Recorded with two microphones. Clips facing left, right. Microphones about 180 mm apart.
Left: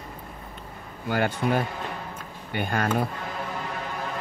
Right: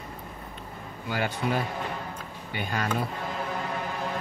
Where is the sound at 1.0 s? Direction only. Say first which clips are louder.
Left 4 dB; 50° left (ahead or behind).